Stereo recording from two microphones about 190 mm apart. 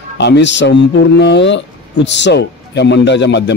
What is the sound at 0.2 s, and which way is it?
Speech, 65° left (ahead or behind).